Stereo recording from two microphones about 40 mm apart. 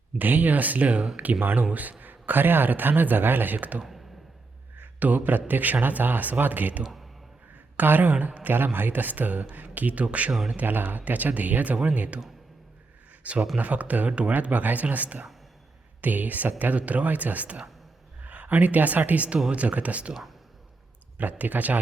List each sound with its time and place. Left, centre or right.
0.2 s a man's voice: right
1.4 s speech: right
1.7 s a man's voice: right
8.1 s a man's voice: right
8.5 s a man's voice: right
10.3 s speech: centre
10.6 s a man's voice: right
13.2 s a man's voice: right
21.2 s a man's voice: right